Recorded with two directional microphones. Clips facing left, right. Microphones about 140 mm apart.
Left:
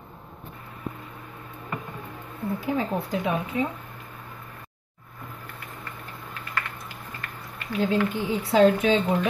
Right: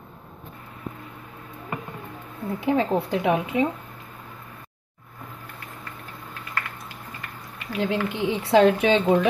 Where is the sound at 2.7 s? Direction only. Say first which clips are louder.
Right 4 dB; 80° right.